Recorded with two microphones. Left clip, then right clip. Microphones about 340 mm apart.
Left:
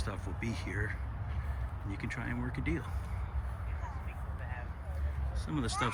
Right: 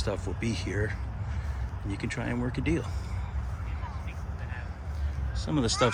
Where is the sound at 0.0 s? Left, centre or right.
Centre.